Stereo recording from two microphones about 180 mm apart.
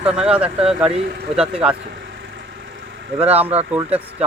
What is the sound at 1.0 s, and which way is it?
Speech, 60° right (ahead or behind).